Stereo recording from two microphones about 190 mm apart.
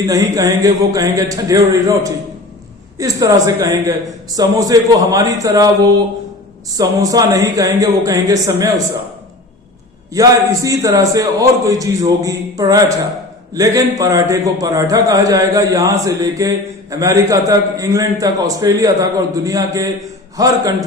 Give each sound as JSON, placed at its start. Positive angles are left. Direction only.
{"t": 0.1, "sound": "speech", "side_deg": -20}
{"t": 10.1, "sound": "a man's voice", "side_deg": -15}